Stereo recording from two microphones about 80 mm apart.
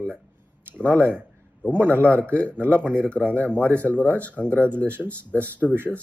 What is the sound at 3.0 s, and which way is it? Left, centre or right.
Speech, centre.